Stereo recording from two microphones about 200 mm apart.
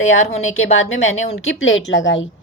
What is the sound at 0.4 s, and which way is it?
Speech, 90° left.